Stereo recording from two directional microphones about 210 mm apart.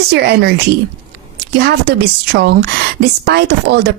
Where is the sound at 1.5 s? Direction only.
50° right (ahead or behind).